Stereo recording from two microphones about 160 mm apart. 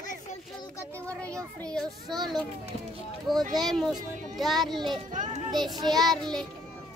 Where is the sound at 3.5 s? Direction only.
Centre (ahead or behind).